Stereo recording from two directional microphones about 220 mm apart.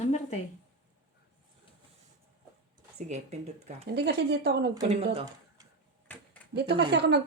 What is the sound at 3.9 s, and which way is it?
Speech, 50° right (ahead or behind).